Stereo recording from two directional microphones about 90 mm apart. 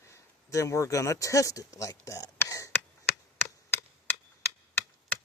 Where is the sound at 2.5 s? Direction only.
35° left (ahead or behind).